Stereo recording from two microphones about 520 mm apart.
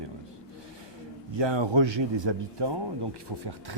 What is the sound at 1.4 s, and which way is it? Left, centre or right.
Speech, right.